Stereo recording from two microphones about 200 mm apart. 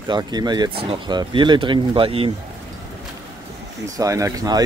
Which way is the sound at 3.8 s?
15° right (ahead or behind).